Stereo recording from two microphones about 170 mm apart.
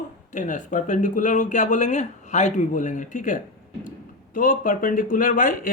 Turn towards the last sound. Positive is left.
turn(degrees=50)  # may be behind; listen again after turning